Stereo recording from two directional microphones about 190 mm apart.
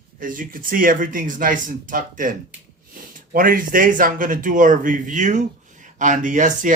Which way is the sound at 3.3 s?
45° right (ahead or behind).